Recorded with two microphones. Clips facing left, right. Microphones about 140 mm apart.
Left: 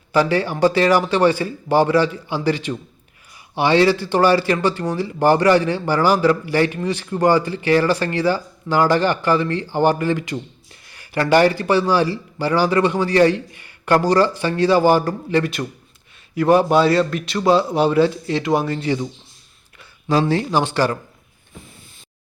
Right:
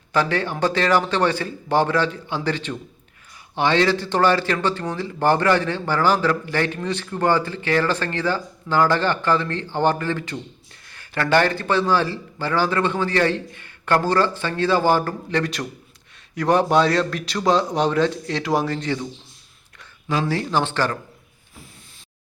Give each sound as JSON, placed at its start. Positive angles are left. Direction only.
{"t": 0.1, "sound": "a man's voice", "side_deg": 10}
{"t": 20.1, "sound": "speech", "side_deg": 35}
{"t": 20.3, "sound": "speech", "side_deg": 15}